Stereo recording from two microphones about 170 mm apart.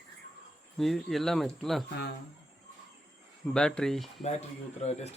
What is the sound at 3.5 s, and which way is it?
Speech, 5° left (ahead or behind).